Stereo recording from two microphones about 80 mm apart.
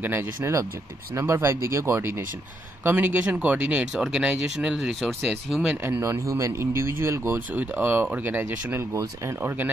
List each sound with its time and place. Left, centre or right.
0.0 s speech: right
1.1 s speech: right
2.8 s speech: right; by 5.8 s centre
5.8 s speech: right
7.5 s speech: right